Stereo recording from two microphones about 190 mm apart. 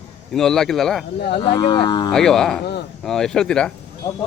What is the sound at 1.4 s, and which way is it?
Speech, 25° left (ahead or behind).